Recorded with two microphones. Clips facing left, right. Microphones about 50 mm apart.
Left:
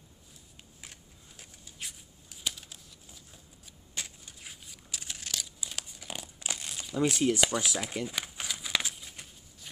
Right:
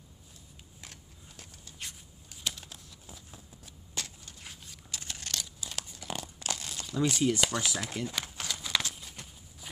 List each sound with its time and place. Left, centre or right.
0.7 s shuffling cards: centre
2.4 s typing: centre
3.9 s vehicle: centre
4.4 s tearing: centre
7.0 s speech: centre
8.9 s a sound: centre